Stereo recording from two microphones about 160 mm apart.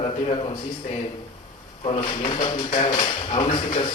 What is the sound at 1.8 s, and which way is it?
A man's voice, 35° left (ahead or behind).